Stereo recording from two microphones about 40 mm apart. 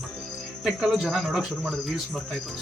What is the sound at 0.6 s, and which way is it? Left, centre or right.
Speech, centre.